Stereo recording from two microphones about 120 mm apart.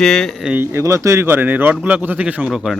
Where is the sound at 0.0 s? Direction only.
Centre (ahead or behind).